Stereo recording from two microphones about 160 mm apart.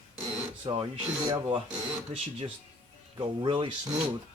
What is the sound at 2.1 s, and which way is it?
Speech, 40° right (ahead or behind).